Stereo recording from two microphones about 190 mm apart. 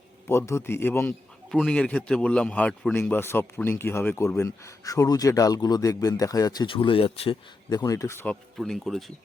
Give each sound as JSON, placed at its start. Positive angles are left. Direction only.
{"t": 0.3, "sound": "a man's voice", "side_deg": 15}
{"t": 8.5, "sound": "speech", "side_deg": 0}